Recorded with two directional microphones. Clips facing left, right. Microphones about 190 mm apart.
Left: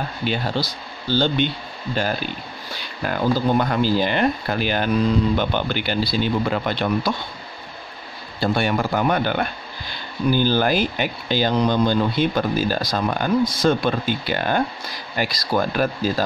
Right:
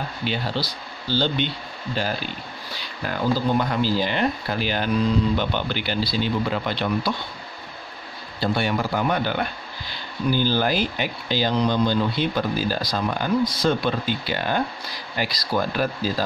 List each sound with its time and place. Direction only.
0.2 s speech: 50° left (ahead or behind)
8.4 s speech: 50° left (ahead or behind)